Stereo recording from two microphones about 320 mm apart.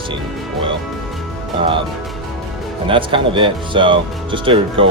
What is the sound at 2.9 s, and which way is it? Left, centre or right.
Speech, centre.